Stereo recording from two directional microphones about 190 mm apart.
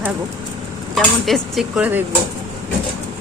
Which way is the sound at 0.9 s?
Centre (ahead or behind).